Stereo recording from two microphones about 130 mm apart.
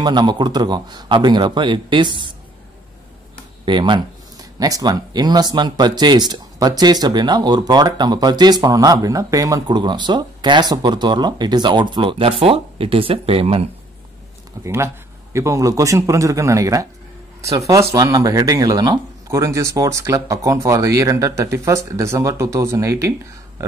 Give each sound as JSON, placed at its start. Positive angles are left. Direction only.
{"t": 0.0, "sound": "speech", "side_deg": -35}
{"t": 3.6, "sound": "speech", "side_deg": -35}
{"t": 14.6, "sound": "speech", "side_deg": -20}